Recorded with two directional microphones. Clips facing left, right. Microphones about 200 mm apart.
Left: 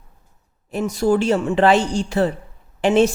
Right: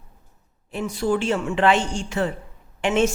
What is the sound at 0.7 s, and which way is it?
A woman's voice, 40° left (ahead or behind).